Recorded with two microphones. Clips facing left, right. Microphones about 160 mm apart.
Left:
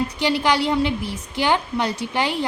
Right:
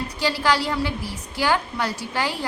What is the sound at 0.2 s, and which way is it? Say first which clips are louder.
A woman's voice: left 1 dB; 20° left (ahead or behind).